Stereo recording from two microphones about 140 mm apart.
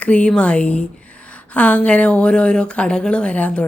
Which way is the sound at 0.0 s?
10° left (ahead or behind).